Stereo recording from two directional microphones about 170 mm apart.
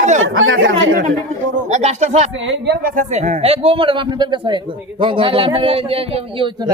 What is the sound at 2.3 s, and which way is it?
Speech, 90° right.